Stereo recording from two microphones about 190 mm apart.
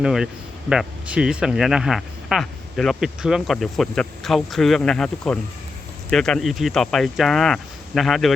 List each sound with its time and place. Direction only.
0.0 s speech: centre (ahead or behind)